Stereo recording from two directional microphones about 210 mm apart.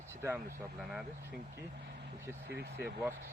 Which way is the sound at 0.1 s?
10° right (ahead or behind).